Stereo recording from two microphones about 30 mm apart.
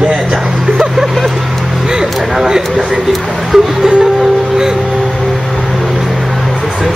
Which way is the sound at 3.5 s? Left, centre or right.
Centre.